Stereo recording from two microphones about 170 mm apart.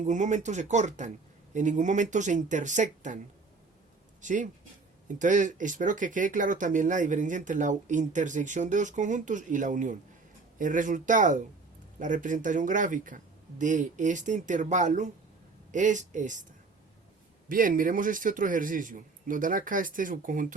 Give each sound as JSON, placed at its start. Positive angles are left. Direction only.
{"t": 0.0, "sound": "speech", "side_deg": -45}
{"t": 4.2, "sound": "speech", "side_deg": -45}
{"t": 17.5, "sound": "speech", "side_deg": -55}